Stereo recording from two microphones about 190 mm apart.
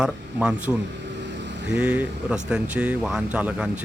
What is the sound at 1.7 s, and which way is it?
Speech, 10° right (ahead or behind).